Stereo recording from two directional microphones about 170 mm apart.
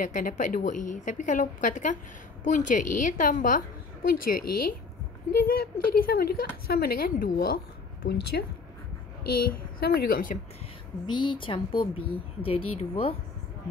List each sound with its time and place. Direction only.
0.0 s a woman's voice: 50° left (ahead or behind); by 8.5 s 70° left (ahead or behind)
9.5 s a woman's voice: 65° left (ahead or behind)
11.1 s speech: 30° left (ahead or behind)